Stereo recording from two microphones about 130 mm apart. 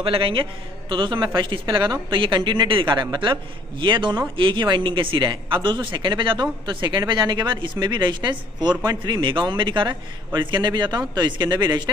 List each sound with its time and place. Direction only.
0.0 s speech: 45° right (ahead or behind)